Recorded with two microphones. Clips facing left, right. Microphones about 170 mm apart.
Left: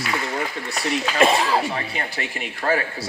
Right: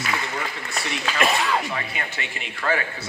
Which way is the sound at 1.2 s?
30° left (ahead or behind).